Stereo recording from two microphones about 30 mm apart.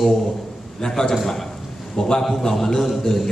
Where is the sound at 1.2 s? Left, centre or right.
Centre.